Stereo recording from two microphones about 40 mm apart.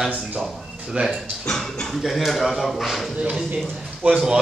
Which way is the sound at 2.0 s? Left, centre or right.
Centre.